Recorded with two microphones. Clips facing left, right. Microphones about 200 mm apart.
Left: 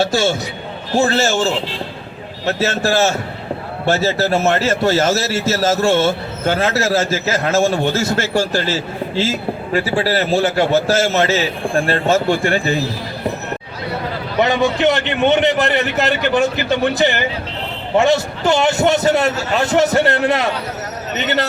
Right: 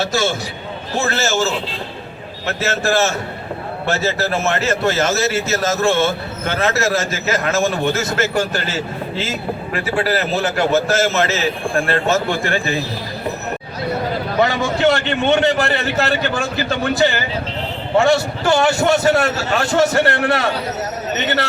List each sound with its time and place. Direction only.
0.0 s a man's voice: 30° left (ahead or behind)
14.4 s a man's voice: 20° left (ahead or behind)